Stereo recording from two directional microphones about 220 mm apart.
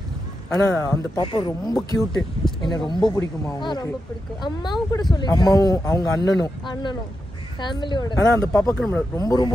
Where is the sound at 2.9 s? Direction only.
20° left (ahead or behind).